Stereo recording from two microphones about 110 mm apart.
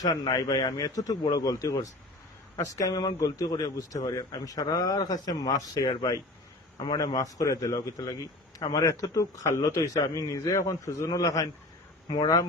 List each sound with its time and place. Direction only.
0.0 s a man's voice: 35° left (ahead or behind)